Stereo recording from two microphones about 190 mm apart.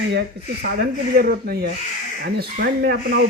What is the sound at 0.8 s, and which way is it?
Speech, 55° right (ahead or behind).